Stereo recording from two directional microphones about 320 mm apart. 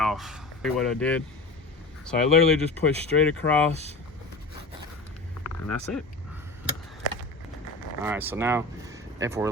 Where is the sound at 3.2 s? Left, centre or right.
Centre.